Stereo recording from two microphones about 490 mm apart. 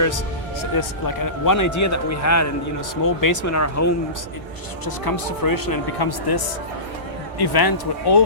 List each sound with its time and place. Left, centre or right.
0.6 s a man's voice: left
4.9 s speech: left